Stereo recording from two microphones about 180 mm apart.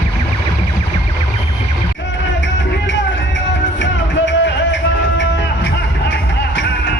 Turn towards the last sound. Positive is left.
turn(degrees=80)